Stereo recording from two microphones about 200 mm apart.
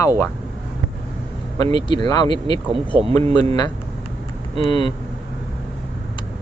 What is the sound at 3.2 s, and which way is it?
Speech, 30° right (ahead or behind).